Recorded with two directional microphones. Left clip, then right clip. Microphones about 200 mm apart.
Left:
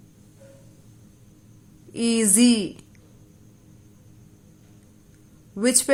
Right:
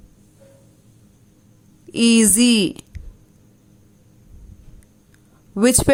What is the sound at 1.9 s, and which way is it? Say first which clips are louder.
Speech: right 7 dB; 35° right (ahead or behind).